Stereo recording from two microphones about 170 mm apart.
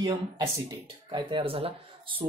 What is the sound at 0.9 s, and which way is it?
Speech, 30° right (ahead or behind).